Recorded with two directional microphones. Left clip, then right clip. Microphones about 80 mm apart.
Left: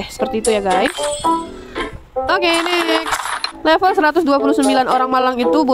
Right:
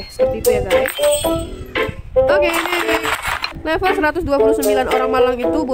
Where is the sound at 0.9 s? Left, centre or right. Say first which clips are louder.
Right 2 dB; centre.